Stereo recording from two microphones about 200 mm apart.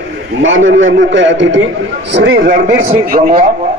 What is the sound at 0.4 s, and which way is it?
A man's voice, 75° right (ahead or behind).